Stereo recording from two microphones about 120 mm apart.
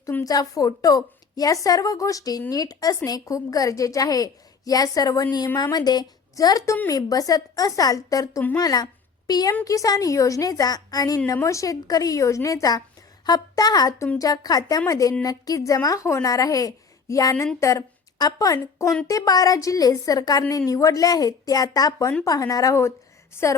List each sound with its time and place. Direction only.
0.3 s a woman's voice: 30° left (ahead or behind)